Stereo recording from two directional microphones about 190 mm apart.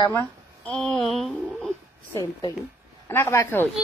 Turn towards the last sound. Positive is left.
turn(degrees=10)  # may be behind; listen again after turning